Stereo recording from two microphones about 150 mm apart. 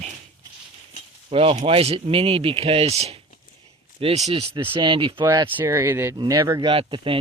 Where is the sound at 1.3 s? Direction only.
40° right (ahead or behind).